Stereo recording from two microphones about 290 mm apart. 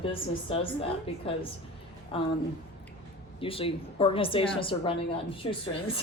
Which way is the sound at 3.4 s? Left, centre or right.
Centre.